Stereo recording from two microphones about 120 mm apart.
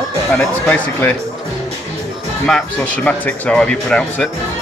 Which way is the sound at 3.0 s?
10° left (ahead or behind).